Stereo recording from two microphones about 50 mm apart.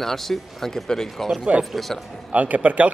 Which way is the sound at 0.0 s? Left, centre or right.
Centre.